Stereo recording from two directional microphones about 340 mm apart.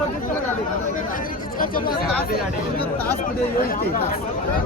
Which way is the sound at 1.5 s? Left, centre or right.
Left.